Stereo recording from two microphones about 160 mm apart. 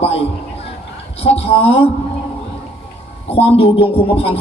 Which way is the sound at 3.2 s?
40° left (ahead or behind).